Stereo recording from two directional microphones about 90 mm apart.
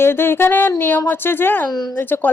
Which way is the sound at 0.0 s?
25° left (ahead or behind).